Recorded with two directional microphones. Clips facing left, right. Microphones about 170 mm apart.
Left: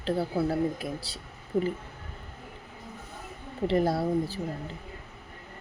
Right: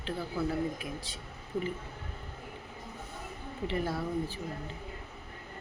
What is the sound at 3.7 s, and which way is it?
Speech, 40° left (ahead or behind).